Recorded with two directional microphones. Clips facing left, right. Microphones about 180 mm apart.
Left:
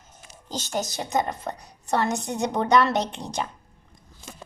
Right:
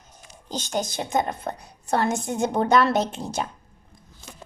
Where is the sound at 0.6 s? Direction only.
Centre (ahead or behind).